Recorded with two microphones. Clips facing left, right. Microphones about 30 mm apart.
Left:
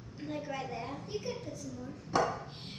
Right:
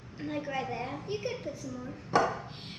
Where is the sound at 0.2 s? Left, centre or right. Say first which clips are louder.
Right 4 dB; centre.